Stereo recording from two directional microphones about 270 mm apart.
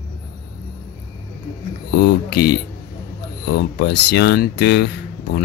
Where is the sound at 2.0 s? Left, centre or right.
Left.